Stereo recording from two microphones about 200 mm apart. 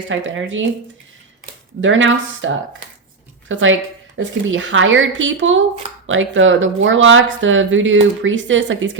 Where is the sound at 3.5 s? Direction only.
75° right (ahead or behind).